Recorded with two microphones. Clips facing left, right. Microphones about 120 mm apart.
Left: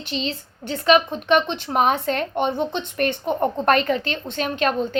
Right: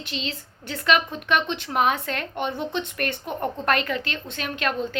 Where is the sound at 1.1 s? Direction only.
25° left (ahead or behind).